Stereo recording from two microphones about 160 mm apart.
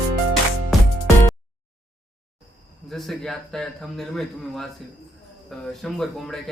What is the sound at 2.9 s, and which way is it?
Speech, centre (ahead or behind).